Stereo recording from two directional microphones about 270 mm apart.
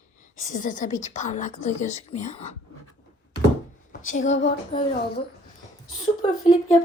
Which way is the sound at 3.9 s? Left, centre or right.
Left.